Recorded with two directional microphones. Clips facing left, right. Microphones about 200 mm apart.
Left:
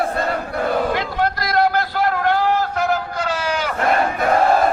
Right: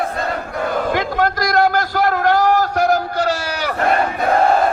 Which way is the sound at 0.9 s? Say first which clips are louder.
Right 3 dB; 50° right (ahead or behind).